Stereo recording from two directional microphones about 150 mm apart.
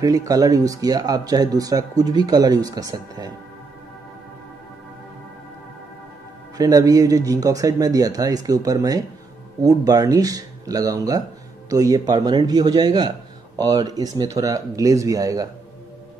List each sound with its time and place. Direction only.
0.0 s speech: 25° right (ahead or behind)
6.5 s speech: 25° right (ahead or behind)